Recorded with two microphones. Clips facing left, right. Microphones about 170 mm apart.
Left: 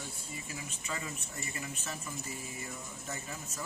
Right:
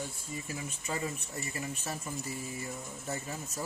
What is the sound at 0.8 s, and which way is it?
Speech, 35° right (ahead or behind).